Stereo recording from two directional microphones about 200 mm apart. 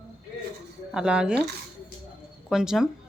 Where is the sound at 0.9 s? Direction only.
5° right (ahead or behind).